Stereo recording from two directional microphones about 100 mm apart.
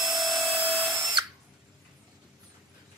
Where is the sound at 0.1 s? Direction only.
40° right (ahead or behind).